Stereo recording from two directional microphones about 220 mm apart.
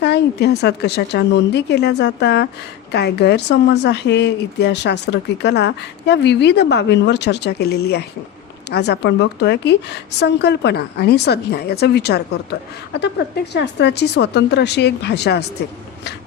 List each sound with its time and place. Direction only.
0.0 s a woman's voice: 50° left (ahead or behind)